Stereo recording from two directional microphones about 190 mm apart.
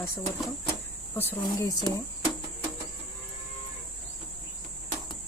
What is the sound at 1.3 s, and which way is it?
Speech, 15° left (ahead or behind).